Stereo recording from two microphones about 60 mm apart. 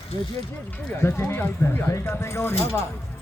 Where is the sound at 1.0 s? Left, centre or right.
Left.